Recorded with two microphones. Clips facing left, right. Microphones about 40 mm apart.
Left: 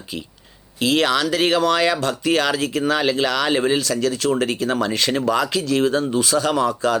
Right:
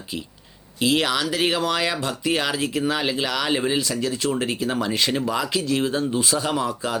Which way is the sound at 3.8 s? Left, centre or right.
Left.